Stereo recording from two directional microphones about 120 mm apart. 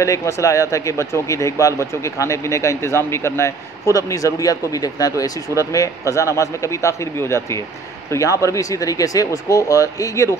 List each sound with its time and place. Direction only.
0.0 s speech: 25° left (ahead or behind)